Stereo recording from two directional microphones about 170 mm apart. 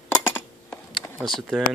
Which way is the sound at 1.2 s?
Centre (ahead or behind).